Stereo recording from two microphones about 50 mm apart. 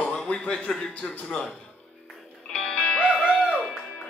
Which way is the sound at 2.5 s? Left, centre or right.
Centre.